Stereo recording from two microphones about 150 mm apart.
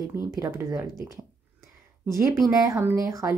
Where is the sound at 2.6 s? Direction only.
20° right (ahead or behind).